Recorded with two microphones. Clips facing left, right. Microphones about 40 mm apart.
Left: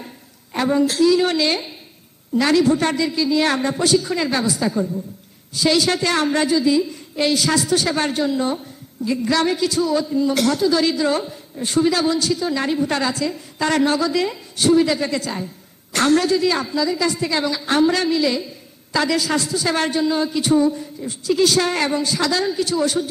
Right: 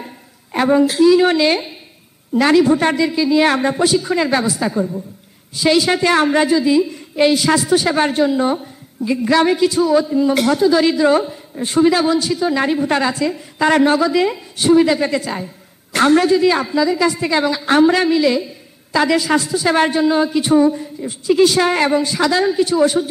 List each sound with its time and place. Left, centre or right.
0.5 s a woman's voice: centre